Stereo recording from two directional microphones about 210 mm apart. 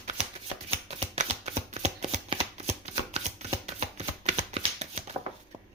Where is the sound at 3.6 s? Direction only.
30° right (ahead or behind).